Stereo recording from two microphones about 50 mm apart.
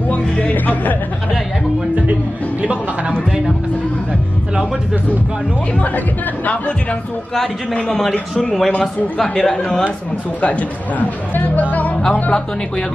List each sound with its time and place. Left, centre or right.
0.1 s music: left
6.4 s speech: left
8.4 s speech: centre
10.4 s speech: left
12.1 s speech: left